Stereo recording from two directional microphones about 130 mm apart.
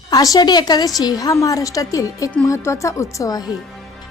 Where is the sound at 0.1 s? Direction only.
25° left (ahead or behind).